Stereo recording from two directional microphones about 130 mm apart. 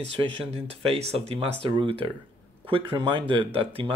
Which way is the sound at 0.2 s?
45° right (ahead or behind).